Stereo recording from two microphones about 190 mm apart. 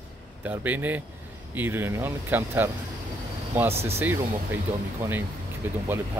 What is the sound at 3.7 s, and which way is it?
Speech, 30° right (ahead or behind).